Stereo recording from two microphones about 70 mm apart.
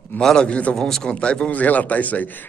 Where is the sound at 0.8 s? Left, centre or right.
Centre; by 2.3 s left.